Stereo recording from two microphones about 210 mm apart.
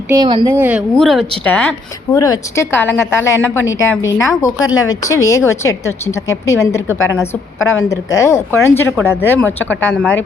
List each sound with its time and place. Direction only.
0.1 s speech: 20° right (ahead or behind)
0.6 s a woman's voice: 5° right (ahead or behind)